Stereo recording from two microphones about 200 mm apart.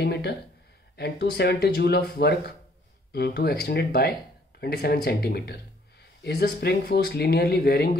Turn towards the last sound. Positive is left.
turn(degrees=50)  # may be behind; listen again after turning